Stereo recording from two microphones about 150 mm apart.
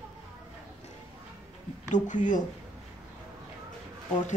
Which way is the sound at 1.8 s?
55° left (ahead or behind).